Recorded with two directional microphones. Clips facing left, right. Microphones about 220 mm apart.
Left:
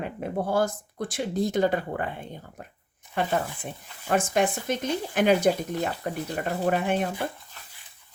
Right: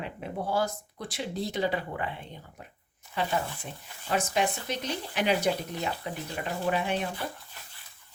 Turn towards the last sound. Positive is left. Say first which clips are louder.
# left 4 dB
turn(degrees=50)  # may be behind; listen again after turning